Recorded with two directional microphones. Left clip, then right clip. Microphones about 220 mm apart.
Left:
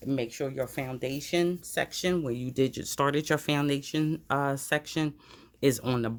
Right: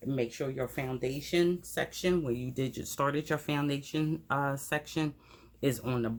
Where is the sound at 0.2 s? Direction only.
40° left (ahead or behind).